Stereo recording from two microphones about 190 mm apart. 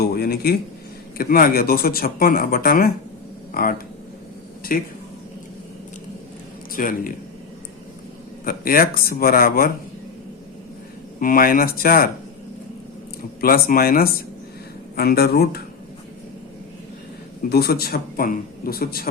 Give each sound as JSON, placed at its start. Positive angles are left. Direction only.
{"t": 0.0, "sound": "speech", "side_deg": 55}
{"t": 6.7, "sound": "speech", "side_deg": 45}
{"t": 8.4, "sound": "speech", "side_deg": 50}
{"t": 11.2, "sound": "speech", "side_deg": 50}
{"t": 13.4, "sound": "speech", "side_deg": 50}
{"t": 17.5, "sound": "speech", "side_deg": 55}